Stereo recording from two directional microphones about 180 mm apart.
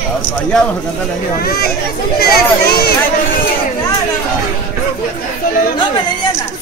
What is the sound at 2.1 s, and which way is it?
Speech, 60° left (ahead or behind).